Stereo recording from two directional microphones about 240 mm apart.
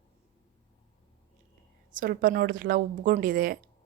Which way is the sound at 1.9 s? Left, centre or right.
Right.